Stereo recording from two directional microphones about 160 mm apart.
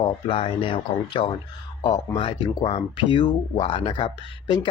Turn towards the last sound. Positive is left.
turn(degrees=30)  # may be behind; listen again after turning